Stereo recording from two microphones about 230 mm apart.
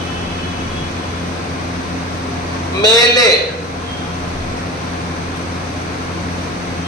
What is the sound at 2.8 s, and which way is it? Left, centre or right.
Speech, centre.